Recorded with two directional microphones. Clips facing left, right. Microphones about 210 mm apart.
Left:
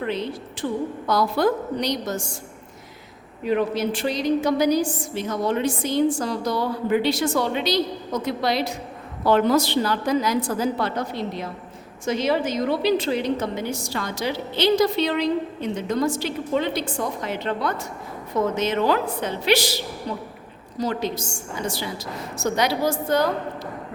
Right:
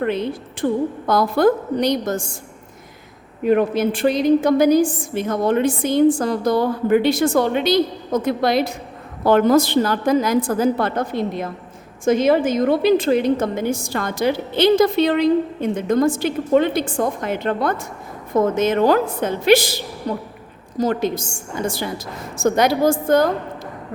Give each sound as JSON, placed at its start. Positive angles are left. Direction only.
{"t": 0.0, "sound": "a woman's voice", "side_deg": -55}
{"t": 3.4, "sound": "a woman's voice", "side_deg": -50}